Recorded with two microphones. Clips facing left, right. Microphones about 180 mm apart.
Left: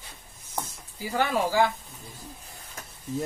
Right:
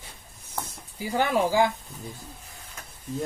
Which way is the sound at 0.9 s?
15° right (ahead or behind).